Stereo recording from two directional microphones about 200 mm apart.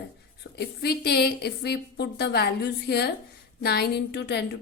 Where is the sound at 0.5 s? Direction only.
55° left (ahead or behind).